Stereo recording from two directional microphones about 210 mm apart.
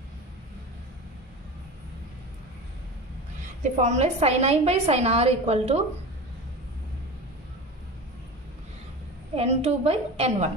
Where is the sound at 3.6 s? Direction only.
35° right (ahead or behind).